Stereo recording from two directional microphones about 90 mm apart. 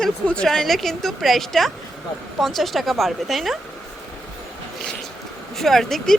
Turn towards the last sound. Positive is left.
turn(degrees=5)  # may be behind; listen again after turning